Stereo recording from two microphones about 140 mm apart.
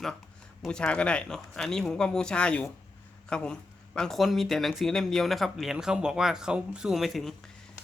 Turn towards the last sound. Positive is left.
turn(degrees=0)  # may be behind; listen again after turning